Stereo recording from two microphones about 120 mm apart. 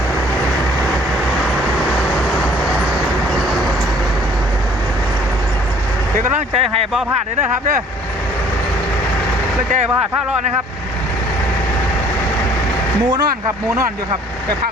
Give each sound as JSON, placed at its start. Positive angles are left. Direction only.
{"t": 6.3, "sound": "speech", "side_deg": -55}